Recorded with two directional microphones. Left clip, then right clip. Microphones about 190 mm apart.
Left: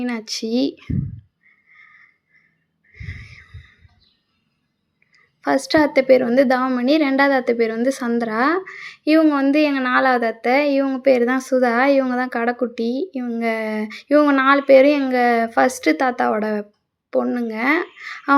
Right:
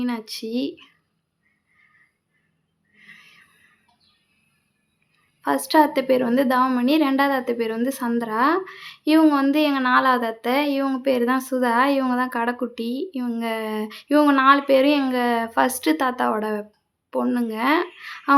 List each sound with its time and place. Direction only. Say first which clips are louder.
0.0 s speech: left 3 dB; 20° left (ahead or behind)
2.9 s a sound: left 7 dB; 20° left (ahead or behind)
5.4 s speech: left 1 dB; 15° left (ahead or behind)